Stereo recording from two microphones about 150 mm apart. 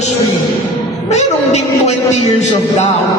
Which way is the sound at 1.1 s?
50° left (ahead or behind).